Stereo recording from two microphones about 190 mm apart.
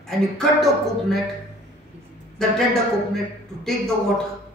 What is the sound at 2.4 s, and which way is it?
Speech, 5° left (ahead or behind).